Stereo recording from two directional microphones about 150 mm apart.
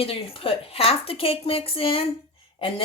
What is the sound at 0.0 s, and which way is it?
A woman's voice, 40° left (ahead or behind).